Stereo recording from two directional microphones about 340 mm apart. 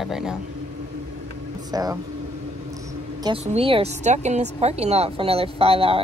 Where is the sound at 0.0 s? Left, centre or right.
Centre.